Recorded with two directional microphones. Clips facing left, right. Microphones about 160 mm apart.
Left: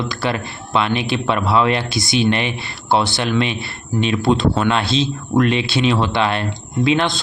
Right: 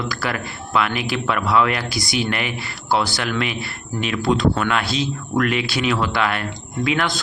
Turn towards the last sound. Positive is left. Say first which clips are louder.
# left 4 dB
turn(degrees=25)  # may be behind; listen again after turning